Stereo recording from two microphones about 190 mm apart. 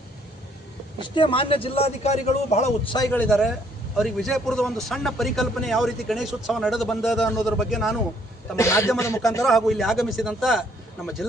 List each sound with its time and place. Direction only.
0.9 s a man's voice: 25° left (ahead or behind)
3.1 s a man's voice: 5° left (ahead or behind)
8.5 s a man's voice: 15° left (ahead or behind)
9.4 s a man's voice: centre (ahead or behind)